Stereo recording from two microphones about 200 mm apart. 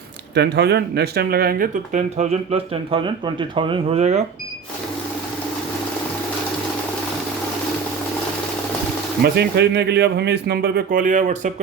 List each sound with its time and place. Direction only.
0.3 s speech: 55° right (ahead or behind); by 4.2 s 30° right (ahead or behind)
9.2 s speech: 55° right (ahead or behind); by 11.5 s 40° right (ahead or behind)